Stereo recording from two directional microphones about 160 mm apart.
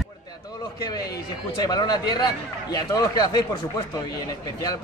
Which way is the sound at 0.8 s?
25° left (ahead or behind).